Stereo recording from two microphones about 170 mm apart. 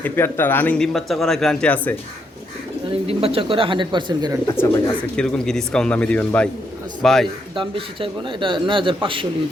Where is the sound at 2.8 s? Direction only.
35° right (ahead or behind).